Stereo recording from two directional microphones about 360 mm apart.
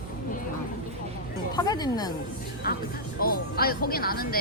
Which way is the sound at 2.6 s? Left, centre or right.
Left.